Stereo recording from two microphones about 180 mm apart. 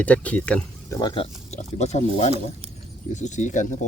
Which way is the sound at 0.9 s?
25° left (ahead or behind).